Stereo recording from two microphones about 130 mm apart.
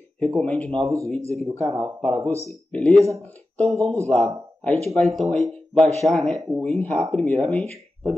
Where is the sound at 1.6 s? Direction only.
25° right (ahead or behind).